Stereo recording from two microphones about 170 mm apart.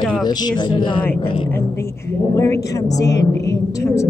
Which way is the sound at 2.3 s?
15° left (ahead or behind).